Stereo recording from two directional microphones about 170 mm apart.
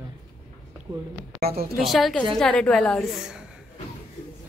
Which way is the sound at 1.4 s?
65° right (ahead or behind).